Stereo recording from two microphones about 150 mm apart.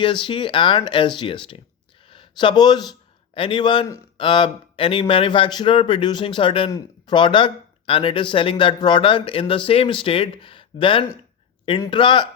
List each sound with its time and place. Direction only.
0.0 s speech: 35° left (ahead or behind)